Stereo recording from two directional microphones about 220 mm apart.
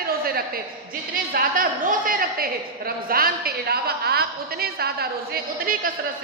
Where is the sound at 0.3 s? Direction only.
45° right (ahead or behind).